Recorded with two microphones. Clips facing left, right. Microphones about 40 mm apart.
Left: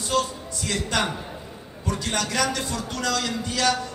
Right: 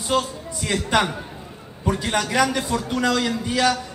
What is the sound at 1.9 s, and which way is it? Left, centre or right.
A man's voice, centre.